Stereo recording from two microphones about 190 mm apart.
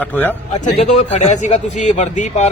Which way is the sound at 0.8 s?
35° left (ahead or behind).